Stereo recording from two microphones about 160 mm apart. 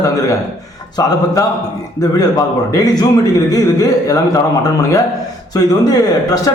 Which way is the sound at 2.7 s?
25° left (ahead or behind).